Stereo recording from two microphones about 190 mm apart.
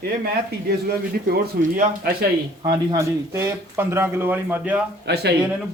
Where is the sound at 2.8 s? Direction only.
15° right (ahead or behind).